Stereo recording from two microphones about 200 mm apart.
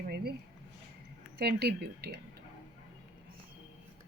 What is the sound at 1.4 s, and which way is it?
Speech, 50° right (ahead or behind).